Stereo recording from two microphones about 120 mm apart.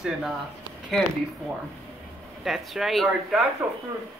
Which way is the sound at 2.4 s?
Centre (ahead or behind).